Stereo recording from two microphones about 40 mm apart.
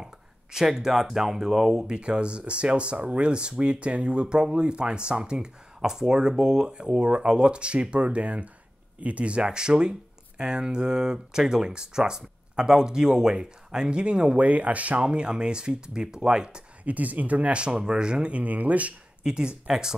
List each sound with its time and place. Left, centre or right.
0.0 s speech: centre
2.0 s speech: right
14.4 s speech: right
16.8 s speech: right
18.3 s speech: right
19.2 s speech: right